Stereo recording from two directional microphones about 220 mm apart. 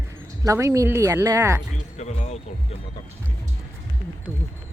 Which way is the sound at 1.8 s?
30° left (ahead or behind).